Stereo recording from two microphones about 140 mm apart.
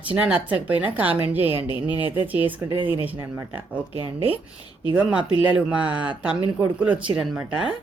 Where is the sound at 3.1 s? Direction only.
25° right (ahead or behind).